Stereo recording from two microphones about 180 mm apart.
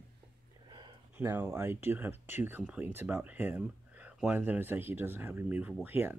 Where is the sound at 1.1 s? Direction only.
10° right (ahead or behind).